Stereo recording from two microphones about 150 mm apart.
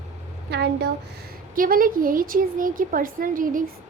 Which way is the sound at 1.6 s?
70° right (ahead or behind).